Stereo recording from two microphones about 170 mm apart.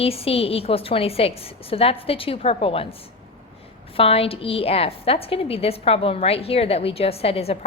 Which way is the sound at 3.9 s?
35° left (ahead or behind).